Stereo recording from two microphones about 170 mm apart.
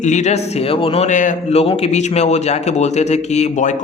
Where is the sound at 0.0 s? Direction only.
45° left (ahead or behind).